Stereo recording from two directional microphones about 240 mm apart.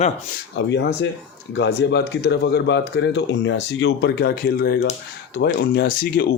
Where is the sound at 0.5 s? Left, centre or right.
Left.